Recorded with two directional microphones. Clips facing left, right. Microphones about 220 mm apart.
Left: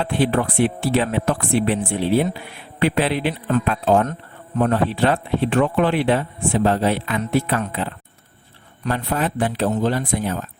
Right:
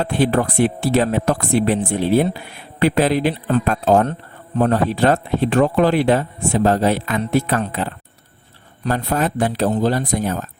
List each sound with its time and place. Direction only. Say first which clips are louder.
0.0 s a man's voice: right 2 dB; 40° right (ahead or behind)